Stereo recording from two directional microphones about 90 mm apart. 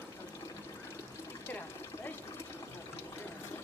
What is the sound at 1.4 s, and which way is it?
Water, 25° left (ahead or behind).